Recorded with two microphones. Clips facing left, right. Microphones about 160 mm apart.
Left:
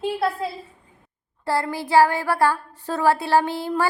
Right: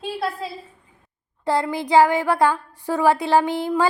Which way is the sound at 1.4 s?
15° right (ahead or behind).